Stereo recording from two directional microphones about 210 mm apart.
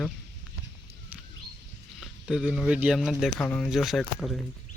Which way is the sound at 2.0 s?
Centre (ahead or behind).